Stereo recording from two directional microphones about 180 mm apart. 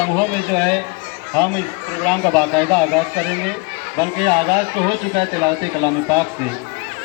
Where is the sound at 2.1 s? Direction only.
5° left (ahead or behind).